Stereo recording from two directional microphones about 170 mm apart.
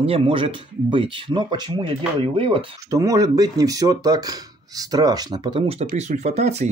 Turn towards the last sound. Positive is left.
turn(degrees=-40)  # may be behind; listen again after turning